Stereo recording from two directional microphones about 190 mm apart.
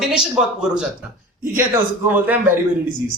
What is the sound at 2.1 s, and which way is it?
Speech, 10° right (ahead or behind).